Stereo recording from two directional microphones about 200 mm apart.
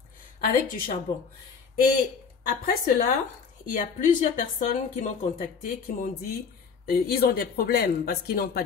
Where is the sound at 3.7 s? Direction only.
40° left (ahead or behind).